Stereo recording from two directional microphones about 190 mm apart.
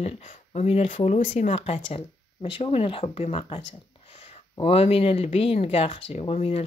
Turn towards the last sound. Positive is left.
turn(degrees=35)  # may be behind; listen again after turning